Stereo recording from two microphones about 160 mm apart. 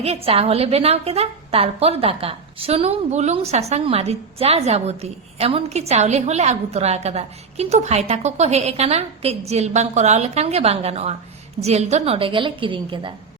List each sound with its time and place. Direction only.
0.0 s a woman's voice: 40° right (ahead or behind)